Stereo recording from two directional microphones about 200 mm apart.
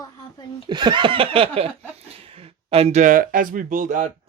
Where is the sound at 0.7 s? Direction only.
20° right (ahead or behind).